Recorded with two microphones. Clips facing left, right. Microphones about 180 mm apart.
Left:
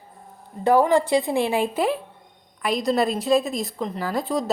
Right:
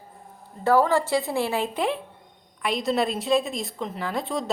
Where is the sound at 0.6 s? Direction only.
15° left (ahead or behind).